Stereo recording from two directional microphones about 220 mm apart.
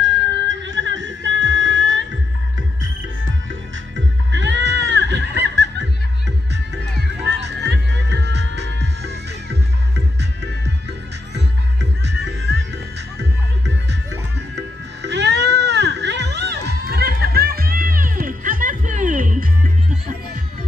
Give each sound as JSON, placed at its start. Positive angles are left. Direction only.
{"t": 0.0, "sound": "music", "side_deg": -55}
{"t": 4.3, "sound": "goat", "side_deg": -55}
{"t": 7.3, "sound": "music", "side_deg": -50}
{"t": 14.5, "sound": "music", "side_deg": -50}